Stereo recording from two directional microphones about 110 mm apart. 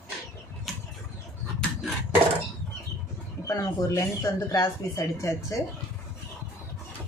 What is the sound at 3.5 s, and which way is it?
Speech, 30° left (ahead or behind).